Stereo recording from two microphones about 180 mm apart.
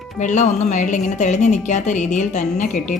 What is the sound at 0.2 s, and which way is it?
A woman's voice, 40° left (ahead or behind).